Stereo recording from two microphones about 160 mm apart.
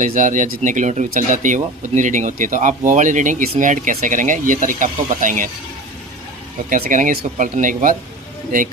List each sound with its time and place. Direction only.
0.0 s speech: 55° right (ahead or behind)
6.7 s speech: 55° right (ahead or behind)